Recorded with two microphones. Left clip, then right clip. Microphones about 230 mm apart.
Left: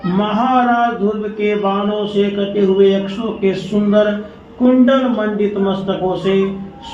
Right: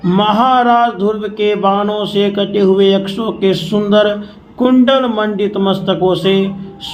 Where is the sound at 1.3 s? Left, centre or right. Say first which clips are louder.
Right 6 dB; right.